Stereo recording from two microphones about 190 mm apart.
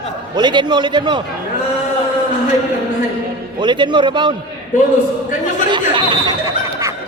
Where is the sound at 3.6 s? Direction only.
25° right (ahead or behind).